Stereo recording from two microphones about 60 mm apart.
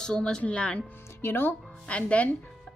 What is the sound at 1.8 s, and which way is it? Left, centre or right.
Speech, left.